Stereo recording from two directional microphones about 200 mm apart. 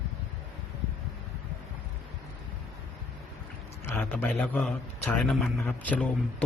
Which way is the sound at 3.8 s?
10° left (ahead or behind).